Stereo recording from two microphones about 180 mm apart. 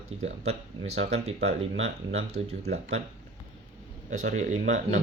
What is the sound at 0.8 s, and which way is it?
Speech, 40° right (ahead or behind).